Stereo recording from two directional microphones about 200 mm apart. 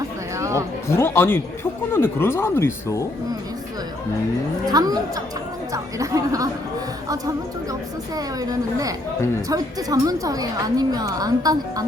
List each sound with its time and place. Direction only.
0.3 s music: 15° right (ahead or behind)
0.9 s speech: 10° left (ahead or behind)
4.6 s a woman's voice: 20° right (ahead or behind)
7.7 s a woman's voice: 20° right (ahead or behind)